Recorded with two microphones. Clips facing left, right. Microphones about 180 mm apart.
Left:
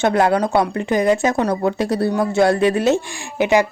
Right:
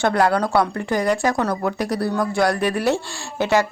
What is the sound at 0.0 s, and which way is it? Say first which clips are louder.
A woman's voice: left 2 dB; 20° left (ahead or behind).